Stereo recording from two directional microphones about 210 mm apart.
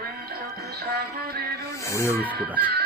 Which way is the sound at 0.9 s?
45° right (ahead or behind).